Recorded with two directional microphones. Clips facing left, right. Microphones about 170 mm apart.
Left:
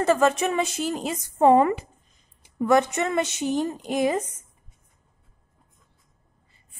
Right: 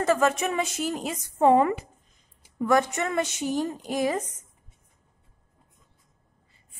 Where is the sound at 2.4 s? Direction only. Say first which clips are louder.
Left 3 dB; 20° left (ahead or behind).